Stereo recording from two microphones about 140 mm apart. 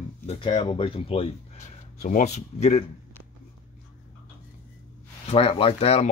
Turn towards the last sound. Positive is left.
turn(degrees=45)  # may be behind; listen again after turning